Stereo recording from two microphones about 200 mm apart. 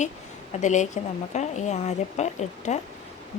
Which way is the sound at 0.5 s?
35° left (ahead or behind).